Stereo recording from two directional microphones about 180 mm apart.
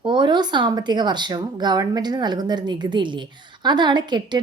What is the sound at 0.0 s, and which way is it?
Speech, 25° right (ahead or behind).